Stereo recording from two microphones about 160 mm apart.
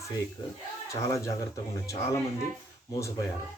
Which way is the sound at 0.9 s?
20° left (ahead or behind).